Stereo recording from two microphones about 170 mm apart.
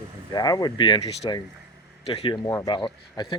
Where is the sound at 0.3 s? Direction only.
25° left (ahead or behind).